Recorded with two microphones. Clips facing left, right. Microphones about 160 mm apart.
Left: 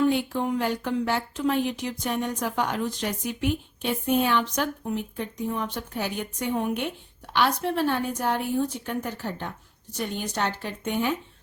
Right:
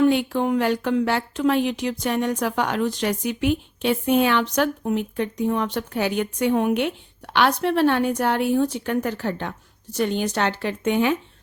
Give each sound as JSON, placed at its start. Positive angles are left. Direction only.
{"t": 0.1, "sound": "a woman's voice", "side_deg": -75}